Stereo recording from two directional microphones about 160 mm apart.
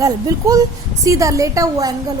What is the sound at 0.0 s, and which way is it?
A woman's voice, 20° right (ahead or behind).